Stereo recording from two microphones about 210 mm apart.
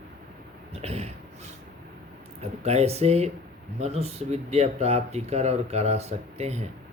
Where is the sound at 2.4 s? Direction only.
30° right (ahead or behind).